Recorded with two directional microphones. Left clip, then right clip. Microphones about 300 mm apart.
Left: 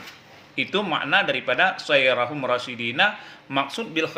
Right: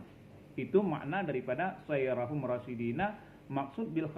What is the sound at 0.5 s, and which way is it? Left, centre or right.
A man's voice, left.